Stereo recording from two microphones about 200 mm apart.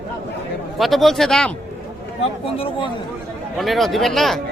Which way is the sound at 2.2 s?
25° left (ahead or behind).